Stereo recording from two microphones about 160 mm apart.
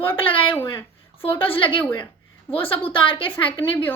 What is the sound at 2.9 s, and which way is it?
Speech, 30° left (ahead or behind).